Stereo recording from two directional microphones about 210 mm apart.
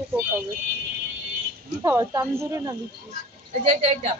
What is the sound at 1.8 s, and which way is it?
Speech, 15° right (ahead or behind).